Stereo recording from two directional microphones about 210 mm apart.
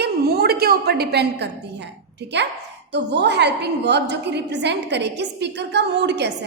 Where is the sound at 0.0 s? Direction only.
50° right (ahead or behind).